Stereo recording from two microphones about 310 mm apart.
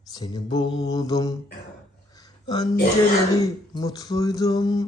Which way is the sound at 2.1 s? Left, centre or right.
Centre.